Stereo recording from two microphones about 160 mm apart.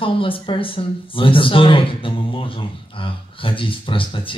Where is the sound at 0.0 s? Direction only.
35° left (ahead or behind).